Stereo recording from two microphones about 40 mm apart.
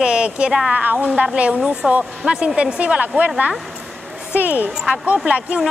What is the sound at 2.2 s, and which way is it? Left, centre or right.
Speech, right.